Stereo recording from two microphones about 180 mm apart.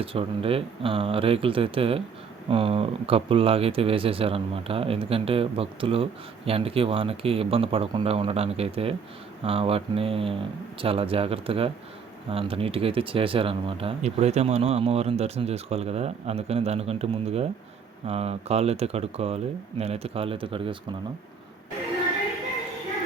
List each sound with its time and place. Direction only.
0.0 s speech: 30° right (ahead or behind)